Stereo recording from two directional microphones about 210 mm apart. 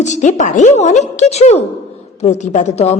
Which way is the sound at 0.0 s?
35° left (ahead or behind).